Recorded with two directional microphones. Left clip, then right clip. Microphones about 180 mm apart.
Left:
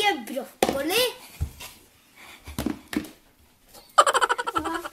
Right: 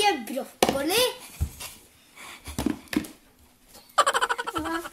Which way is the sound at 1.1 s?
15° right (ahead or behind).